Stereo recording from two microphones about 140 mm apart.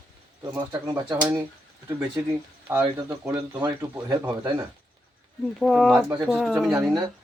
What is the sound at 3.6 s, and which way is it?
Speech, 25° right (ahead or behind).